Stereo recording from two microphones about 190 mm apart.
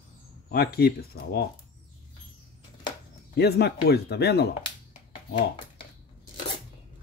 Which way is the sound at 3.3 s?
60° left (ahead or behind).